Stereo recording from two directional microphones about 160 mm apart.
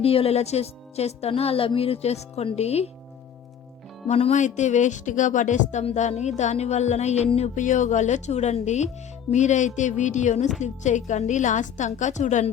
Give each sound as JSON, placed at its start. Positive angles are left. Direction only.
{"t": 0.0, "sound": "a woman's voice", "side_deg": 35}
{"t": 4.1, "sound": "speech", "side_deg": 45}